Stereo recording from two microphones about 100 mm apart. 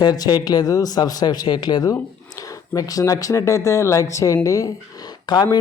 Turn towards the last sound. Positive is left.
turn(degrees=45)  # may be behind; listen again after turning